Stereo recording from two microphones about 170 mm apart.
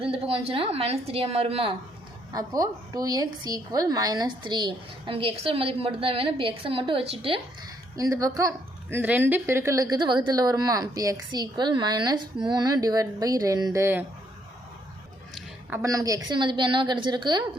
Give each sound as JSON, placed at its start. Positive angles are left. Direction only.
{"t": 0.0, "sound": "a woman's voice", "side_deg": -35}
{"t": 2.3, "sound": "a woman's voice", "side_deg": -20}
{"t": 7.9, "sound": "a woman's voice", "side_deg": -20}
{"t": 15.7, "sound": "a woman's voice", "side_deg": -20}